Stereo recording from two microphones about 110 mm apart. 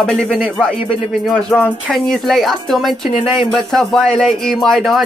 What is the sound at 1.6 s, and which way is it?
Speech, 15° left (ahead or behind).